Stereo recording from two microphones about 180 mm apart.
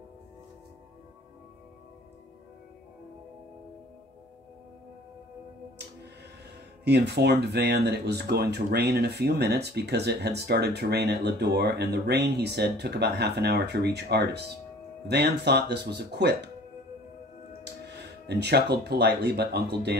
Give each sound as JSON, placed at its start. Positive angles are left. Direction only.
{"t": 6.8, "sound": "speech", "side_deg": -65}
{"t": 17.8, "sound": "speech", "side_deg": -65}